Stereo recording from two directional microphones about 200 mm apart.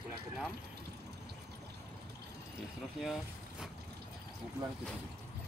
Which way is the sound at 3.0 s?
Centre (ahead or behind).